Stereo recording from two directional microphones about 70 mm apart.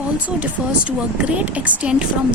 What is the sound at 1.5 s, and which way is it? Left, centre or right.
Speech, centre.